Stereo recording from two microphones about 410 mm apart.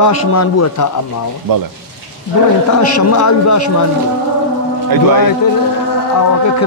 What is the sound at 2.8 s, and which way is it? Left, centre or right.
Speech, left.